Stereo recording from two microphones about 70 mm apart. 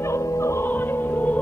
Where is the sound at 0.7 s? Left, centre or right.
Left.